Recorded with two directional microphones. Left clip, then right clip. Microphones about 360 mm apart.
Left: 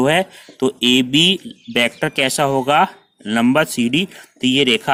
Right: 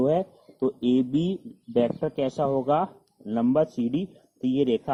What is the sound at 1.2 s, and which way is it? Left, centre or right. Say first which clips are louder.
Speech: left 16 dB; left.